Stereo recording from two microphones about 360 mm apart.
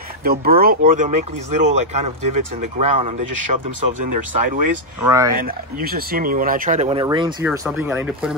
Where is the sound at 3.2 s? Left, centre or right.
Right.